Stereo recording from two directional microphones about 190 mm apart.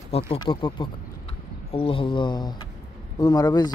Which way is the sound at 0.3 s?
25° left (ahead or behind).